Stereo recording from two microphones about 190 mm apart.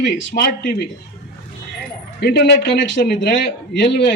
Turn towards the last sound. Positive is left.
turn(degrees=65)  # may be behind; listen again after turning